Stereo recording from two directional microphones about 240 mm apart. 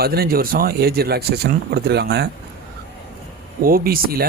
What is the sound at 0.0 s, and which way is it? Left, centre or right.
Speech, right.